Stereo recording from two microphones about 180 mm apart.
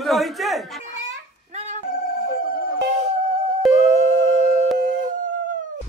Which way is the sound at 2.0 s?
55° left (ahead or behind).